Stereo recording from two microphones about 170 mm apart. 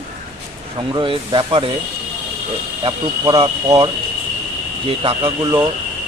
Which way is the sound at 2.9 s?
30° right (ahead or behind).